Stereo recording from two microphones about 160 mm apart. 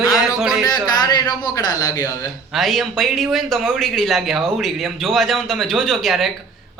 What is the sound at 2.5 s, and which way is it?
Speech, centre (ahead or behind).